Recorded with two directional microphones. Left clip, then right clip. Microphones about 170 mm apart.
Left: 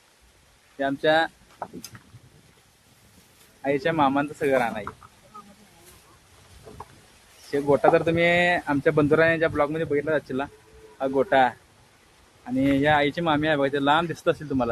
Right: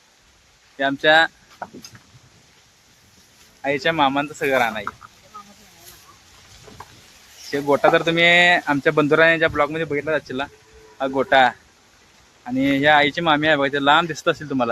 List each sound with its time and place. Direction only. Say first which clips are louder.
0.8 s speech: right 6 dB; 15° right (ahead or behind)
3.6 s speech: right 4 dB; 25° right (ahead or behind)
7.5 s speech: right 3 dB; 25° right (ahead or behind)